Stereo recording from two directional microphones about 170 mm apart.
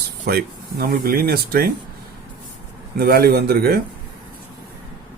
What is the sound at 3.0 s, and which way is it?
Speech, 65° right (ahead or behind).